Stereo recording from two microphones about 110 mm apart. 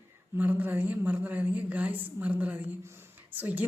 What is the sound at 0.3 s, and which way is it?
A woman's voice, 15° right (ahead or behind).